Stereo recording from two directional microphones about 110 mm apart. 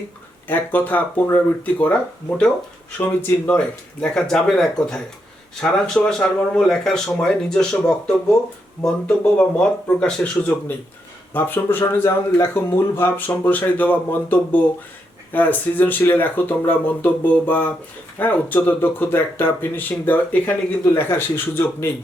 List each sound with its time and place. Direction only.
0.4 s speech: 15° left (ahead or behind)
3.1 s speech: 20° left (ahead or behind)
4.0 s speech: 5° left (ahead or behind)
9.6 s speech: 10° left (ahead or behind)